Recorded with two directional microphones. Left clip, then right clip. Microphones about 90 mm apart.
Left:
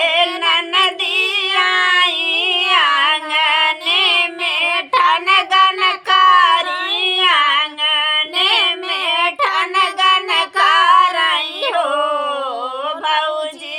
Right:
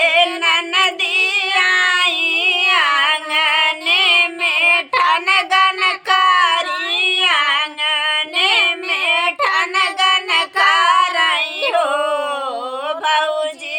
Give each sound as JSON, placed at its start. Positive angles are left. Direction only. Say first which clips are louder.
{"t": 0.0, "sound": "female singing", "louder": "right 1 dB", "side_deg": -20}
{"t": 4.9, "sound": "child singing", "louder": "left 1 dB", "side_deg": -25}
{"t": 9.1, "sound": "female singing", "louder": "left 1 dB", "side_deg": 50}
{"t": 9.5, "sound": "child singing", "louder": "even", "side_deg": -25}
{"t": 11.7, "sound": "a sound", "louder": "left 1 dB", "side_deg": -20}
{"t": 13.1, "sound": "female singing", "louder": "right 1 dB", "side_deg": -25}